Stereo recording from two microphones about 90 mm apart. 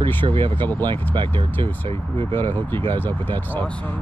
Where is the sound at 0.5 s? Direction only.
20° left (ahead or behind).